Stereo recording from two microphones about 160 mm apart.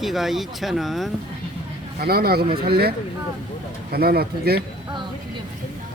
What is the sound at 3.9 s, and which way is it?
Speech, 75° right (ahead or behind).